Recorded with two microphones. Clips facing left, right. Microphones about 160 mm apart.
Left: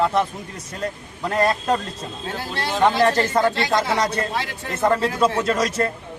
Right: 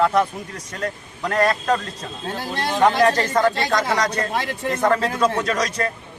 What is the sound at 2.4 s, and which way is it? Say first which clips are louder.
Speech: right 3 dB; 15° right (ahead or behind).